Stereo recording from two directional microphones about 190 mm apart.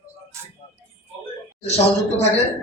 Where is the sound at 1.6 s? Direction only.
35° left (ahead or behind).